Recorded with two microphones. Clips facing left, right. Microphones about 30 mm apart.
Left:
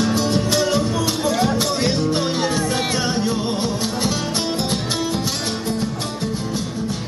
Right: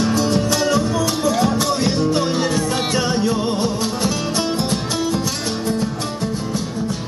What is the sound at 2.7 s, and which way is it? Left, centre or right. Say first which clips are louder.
Music: right 1 dB; centre.